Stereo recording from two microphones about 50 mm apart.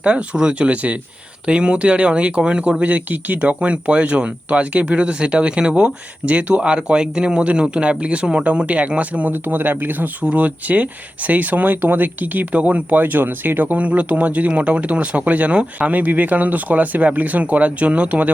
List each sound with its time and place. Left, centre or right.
0.0 s speech: right
2.8 s speech: right
9.3 s speech: right